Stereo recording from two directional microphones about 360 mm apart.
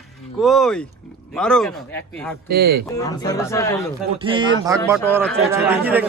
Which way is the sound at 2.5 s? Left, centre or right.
Right.